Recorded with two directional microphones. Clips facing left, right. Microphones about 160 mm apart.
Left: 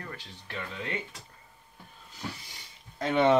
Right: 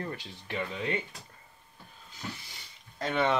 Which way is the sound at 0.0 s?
25° right (ahead or behind).